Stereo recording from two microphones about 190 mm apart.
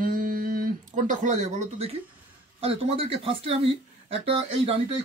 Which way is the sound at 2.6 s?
30° right (ahead or behind).